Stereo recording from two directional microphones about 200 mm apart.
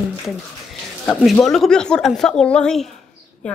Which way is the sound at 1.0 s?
Centre (ahead or behind).